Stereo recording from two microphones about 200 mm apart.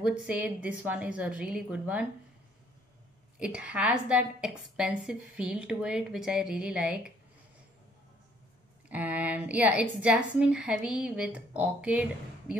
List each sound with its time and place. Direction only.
0.0 s a woman's voice: 5° right (ahead or behind)
3.3 s a woman's voice: 5° right (ahead or behind)
8.8 s a woman's voice: 5° right (ahead or behind)